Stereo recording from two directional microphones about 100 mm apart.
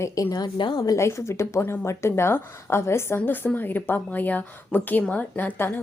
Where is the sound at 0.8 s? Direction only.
30° left (ahead or behind).